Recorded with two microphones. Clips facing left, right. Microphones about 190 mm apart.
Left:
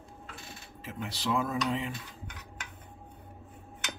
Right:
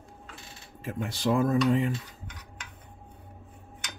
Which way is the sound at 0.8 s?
50° right (ahead or behind).